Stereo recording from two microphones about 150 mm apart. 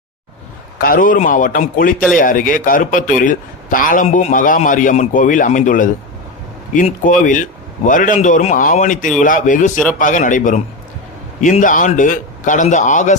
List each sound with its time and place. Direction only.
0.8 s a man's voice: 75° left (ahead or behind); by 13.1 s 55° left (ahead or behind)